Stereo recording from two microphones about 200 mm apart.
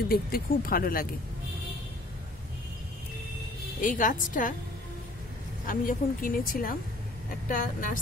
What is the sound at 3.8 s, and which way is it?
Speech, 40° left (ahead or behind).